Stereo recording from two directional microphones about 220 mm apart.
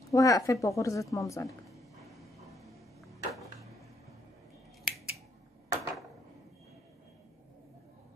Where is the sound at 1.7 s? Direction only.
Centre (ahead or behind).